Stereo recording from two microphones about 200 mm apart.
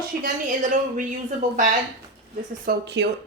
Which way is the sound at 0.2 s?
40° right (ahead or behind).